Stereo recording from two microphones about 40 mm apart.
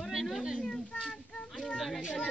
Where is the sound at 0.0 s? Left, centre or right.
Centre.